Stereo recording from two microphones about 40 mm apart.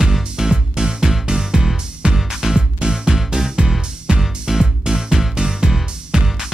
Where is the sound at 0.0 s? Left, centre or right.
Centre.